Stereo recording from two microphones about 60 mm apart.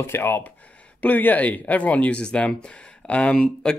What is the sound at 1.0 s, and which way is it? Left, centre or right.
Speech, left.